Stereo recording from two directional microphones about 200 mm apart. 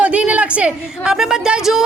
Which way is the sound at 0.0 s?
5° right (ahead or behind).